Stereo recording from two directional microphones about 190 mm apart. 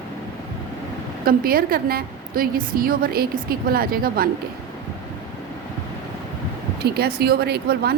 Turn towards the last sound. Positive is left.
turn(degrees=-55)  # may be behind; listen again after turning